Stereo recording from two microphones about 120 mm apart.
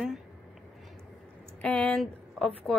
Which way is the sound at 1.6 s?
10° left (ahead or behind).